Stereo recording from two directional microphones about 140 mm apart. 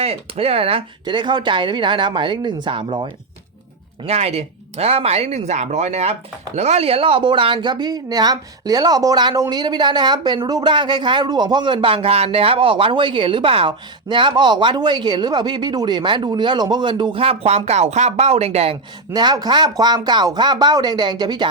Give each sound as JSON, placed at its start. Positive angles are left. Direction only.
{"t": 0.0, "sound": "speech", "side_deg": -45}
{"t": 4.0, "sound": "speech", "side_deg": -50}
{"t": 19.1, "sound": "speech", "side_deg": -30}